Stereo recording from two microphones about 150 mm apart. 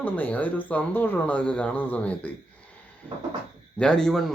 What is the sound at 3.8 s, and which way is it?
Speech, 5° left (ahead or behind).